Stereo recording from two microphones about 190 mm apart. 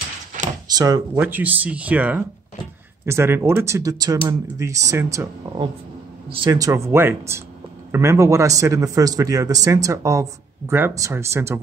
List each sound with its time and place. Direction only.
0.7 s a man's voice: 20° right (ahead or behind)
6.3 s a man's voice: 20° right (ahead or behind)